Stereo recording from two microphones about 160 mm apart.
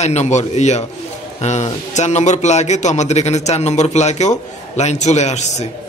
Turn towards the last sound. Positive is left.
turn(degrees=45)  # may be behind; listen again after turning